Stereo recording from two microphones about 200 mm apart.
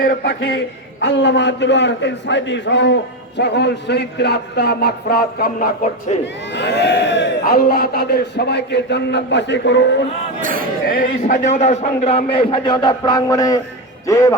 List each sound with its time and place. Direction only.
0.0 s a man's voice: 45° left (ahead or behind)
6.5 s a man's voice: 60° left (ahead or behind)
10.4 s speech: 45° right (ahead or behind)
10.8 s a man's voice: 45° left (ahead or behind); by 14.3 s 15° left (ahead or behind)